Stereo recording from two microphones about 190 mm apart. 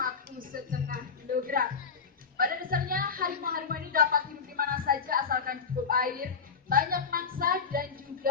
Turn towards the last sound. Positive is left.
turn(degrees=-50)  # may be behind; listen again after turning